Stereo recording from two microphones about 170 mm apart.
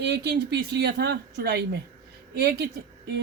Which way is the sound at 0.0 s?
80° right.